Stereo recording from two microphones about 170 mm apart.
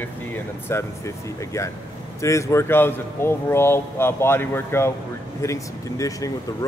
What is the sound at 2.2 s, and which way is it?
Speech, 15° left (ahead or behind).